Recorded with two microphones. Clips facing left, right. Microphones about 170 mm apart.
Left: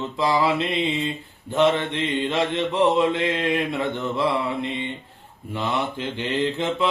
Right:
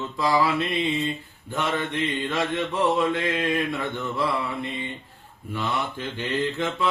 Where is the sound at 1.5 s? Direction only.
20° left (ahead or behind).